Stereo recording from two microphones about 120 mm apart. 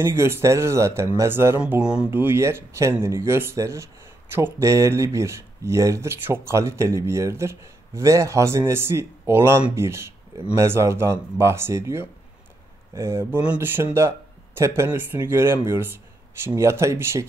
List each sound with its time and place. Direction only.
0.0 s speech: 20° right (ahead or behind)
1.6 s speech: 10° right (ahead or behind)
2.0 s speech: 20° right (ahead or behind)